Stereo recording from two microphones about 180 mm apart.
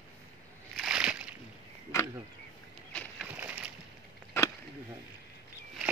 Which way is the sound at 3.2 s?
10° right (ahead or behind).